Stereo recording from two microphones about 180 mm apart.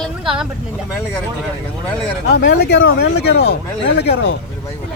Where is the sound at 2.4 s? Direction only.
70° left (ahead or behind).